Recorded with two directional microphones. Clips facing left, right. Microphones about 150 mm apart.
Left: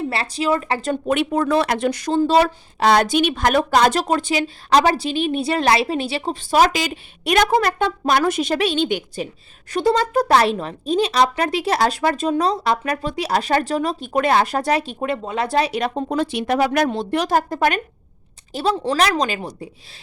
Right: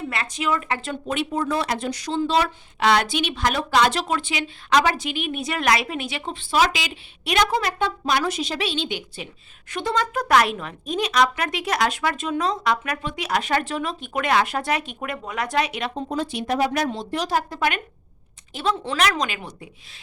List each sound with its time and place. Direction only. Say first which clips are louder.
0.1 s speech: left 2 dB; 35° left (ahead or behind)
1.0 s speech: left 5 dB; 60° left (ahead or behind); by 15.9 s 35° left (ahead or behind)
16.0 s speech: left 5 dB; 70° left (ahead or behind)
17.2 s speech: left 3 dB; 45° left (ahead or behind)